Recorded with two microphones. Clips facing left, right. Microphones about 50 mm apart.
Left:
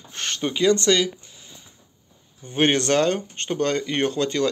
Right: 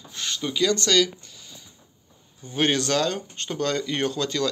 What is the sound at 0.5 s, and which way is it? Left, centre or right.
Speech, left.